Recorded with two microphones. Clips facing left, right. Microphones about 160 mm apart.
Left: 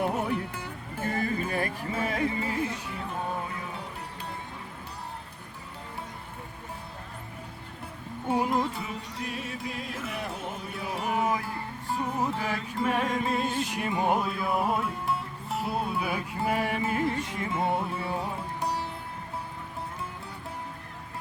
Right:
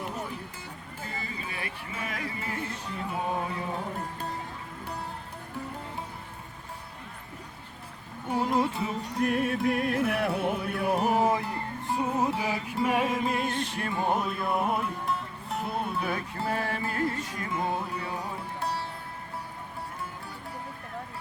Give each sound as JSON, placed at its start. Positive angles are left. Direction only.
{"t": 0.0, "sound": "music", "side_deg": 65}
{"t": 3.8, "sound": "music", "side_deg": -45}
{"t": 8.3, "sound": "music", "side_deg": 25}
{"t": 9.1, "sound": "music", "side_deg": -55}
{"t": 13.7, "sound": "music", "side_deg": 15}
{"t": 14.2, "sound": "music", "side_deg": 0}